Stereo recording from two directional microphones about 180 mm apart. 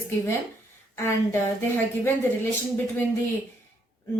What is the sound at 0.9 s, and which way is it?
Speech, 15° left (ahead or behind).